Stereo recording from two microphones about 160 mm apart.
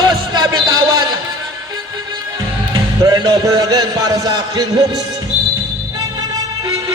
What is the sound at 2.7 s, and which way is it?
Music, 25° right (ahead or behind).